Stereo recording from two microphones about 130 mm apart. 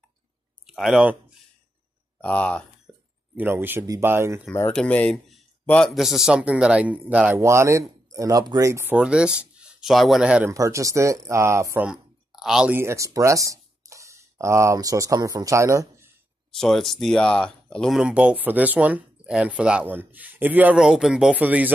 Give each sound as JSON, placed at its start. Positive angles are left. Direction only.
{"t": 0.7, "sound": "speech", "side_deg": -5}
{"t": 2.2, "sound": "speech", "side_deg": 10}
{"t": 2.9, "sound": "a sound", "side_deg": -10}
{"t": 3.3, "sound": "speech", "side_deg": -15}
{"t": 4.5, "sound": "speech", "side_deg": 15}
{"t": 7.3, "sound": "speech", "side_deg": -20}
{"t": 8.9, "sound": "speech", "side_deg": -10}
{"t": 10.5, "sound": "speech", "side_deg": -25}
{"t": 11.8, "sound": "a sound", "side_deg": -5}
{"t": 12.7, "sound": "speech", "side_deg": -20}
{"t": 16.5, "sound": "speech", "side_deg": 0}